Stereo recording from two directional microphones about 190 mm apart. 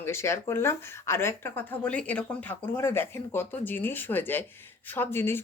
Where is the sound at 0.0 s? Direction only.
15° left (ahead or behind).